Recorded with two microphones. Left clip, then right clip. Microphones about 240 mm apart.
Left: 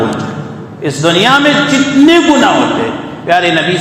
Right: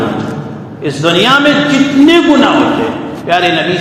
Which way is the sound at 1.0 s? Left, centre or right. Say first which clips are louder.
Even; left.